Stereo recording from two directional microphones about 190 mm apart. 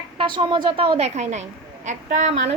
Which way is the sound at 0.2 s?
25° right (ahead or behind).